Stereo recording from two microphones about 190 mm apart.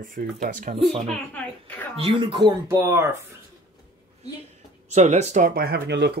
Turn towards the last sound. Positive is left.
turn(degrees=-65)  # may be behind; listen again after turning